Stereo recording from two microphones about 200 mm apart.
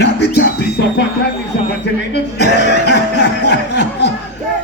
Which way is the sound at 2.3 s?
55° left (ahead or behind).